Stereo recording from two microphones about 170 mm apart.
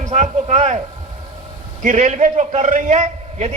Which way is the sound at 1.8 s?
50° right (ahead or behind).